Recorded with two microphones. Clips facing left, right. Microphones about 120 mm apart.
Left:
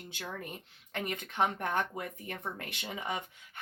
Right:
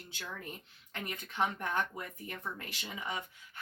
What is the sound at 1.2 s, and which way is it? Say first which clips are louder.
Speech: left 2 dB; 55° left (ahead or behind).